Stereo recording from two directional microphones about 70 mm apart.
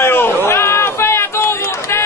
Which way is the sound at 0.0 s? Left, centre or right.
Left.